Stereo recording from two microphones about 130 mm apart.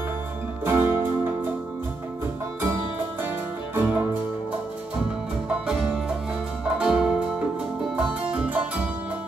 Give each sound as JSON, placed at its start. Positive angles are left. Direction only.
{"t": 0.7, "sound": "music", "side_deg": -15}
{"t": 3.7, "sound": "music", "side_deg": -10}
{"t": 6.8, "sound": "music", "side_deg": -5}